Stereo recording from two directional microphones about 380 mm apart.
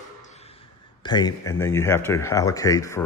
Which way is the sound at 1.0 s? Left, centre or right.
Centre.